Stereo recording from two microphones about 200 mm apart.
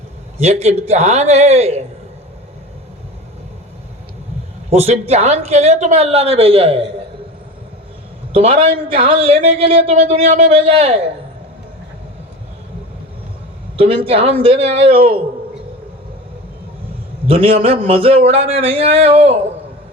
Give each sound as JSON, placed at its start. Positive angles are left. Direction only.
{"t": 0.3, "sound": "a woman's voice", "side_deg": -35}
{"t": 4.7, "sound": "a woman's voice", "side_deg": -30}
{"t": 8.3, "sound": "a man's voice", "side_deg": -30}
{"t": 13.7, "sound": "a man's voice", "side_deg": -30}
{"t": 17.2, "sound": "a man's voice", "side_deg": -30}